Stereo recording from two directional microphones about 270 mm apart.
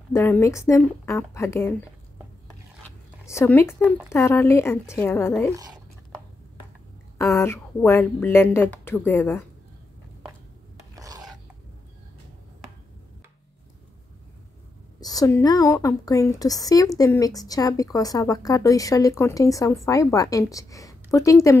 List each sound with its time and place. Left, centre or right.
0.1 s speech: centre
3.3 s speech: centre
5.5 s speech: centre
7.2 s speech: centre
11.0 s filing: centre
15.0 s speech: centre